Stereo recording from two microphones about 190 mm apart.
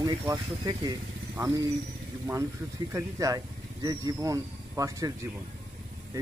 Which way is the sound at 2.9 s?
15° right (ahead or behind).